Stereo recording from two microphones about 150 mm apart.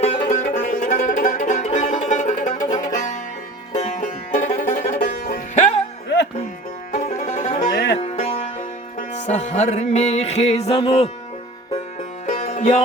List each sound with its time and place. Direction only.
0.0 s music: 55° left (ahead or behind)
6.9 s music: 45° left (ahead or behind)
12.2 s music: 50° left (ahead or behind)